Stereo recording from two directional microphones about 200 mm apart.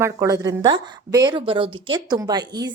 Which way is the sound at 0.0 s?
15° right (ahead or behind).